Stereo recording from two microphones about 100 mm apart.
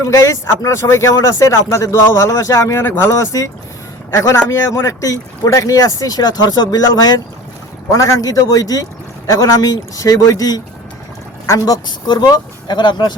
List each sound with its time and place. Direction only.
0.0 s speech: 30° left (ahead or behind); by 13.1 s 50° left (ahead or behind)